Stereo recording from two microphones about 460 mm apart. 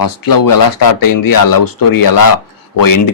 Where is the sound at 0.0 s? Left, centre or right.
Left.